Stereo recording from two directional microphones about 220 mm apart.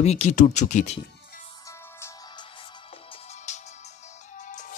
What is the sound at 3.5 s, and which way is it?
Music, 30° left (ahead or behind).